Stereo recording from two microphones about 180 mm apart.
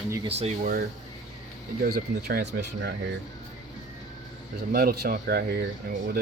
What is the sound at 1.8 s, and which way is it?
Speech, 55° right (ahead or behind).